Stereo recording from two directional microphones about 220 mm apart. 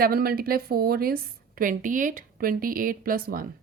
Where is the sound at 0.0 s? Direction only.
40° right (ahead or behind).